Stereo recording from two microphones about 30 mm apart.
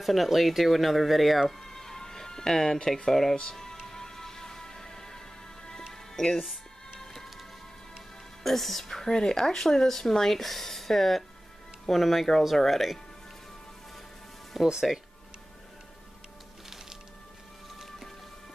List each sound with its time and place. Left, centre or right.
0.0 s speech: centre
1.6 s music: centre
3.1 s speech: centre
3.8 s music: centre
6.1 s speech: centre
6.4 s music: centre
8.5 s speech: centre
9.0 s speech: left; by 12.8 s centre
14.5 s speech: centre